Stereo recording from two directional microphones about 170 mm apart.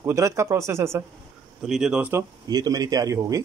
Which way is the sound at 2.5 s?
20° right (ahead or behind).